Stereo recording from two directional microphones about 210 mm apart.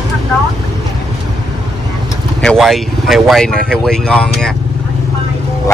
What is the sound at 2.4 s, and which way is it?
Speech, centre (ahead or behind).